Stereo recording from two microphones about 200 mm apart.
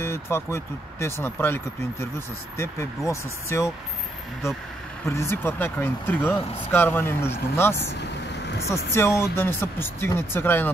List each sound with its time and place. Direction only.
0.0 s speech: 10° left (ahead or behind)
5.0 s speech: 15° left (ahead or behind)
8.9 s speech: 15° left (ahead or behind)